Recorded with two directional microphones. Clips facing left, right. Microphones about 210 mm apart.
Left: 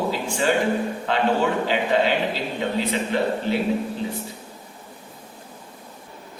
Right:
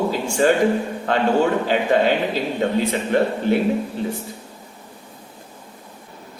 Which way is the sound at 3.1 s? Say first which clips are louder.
Right 5 dB; 50° right (ahead or behind).